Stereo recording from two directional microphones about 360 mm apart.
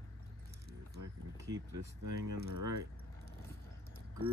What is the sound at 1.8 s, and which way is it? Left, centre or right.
Speech, right.